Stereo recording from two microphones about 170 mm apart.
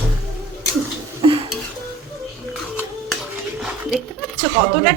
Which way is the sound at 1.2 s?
30° right (ahead or behind).